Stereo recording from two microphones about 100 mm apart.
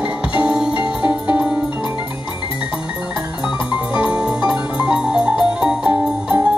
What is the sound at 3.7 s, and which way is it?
Music, 10° right (ahead or behind).